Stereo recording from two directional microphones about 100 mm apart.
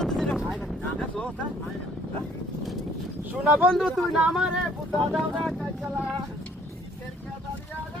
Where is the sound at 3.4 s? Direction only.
15° right (ahead or behind).